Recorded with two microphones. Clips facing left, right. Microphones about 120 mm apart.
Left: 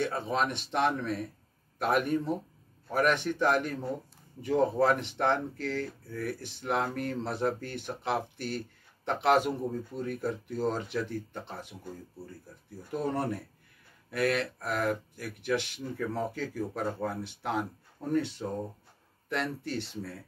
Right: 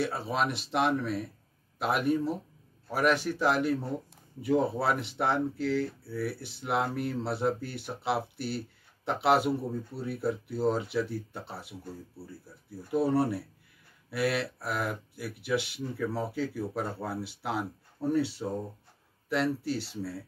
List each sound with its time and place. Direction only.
0.0 s a man's voice: 5° right (ahead or behind)
12.9 s a man's voice: 10° right (ahead or behind)